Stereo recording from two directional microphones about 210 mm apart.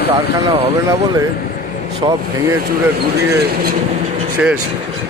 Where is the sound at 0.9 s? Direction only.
15° right (ahead or behind).